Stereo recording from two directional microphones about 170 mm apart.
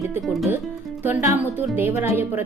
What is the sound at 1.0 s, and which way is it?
Speech, 10° right (ahead or behind).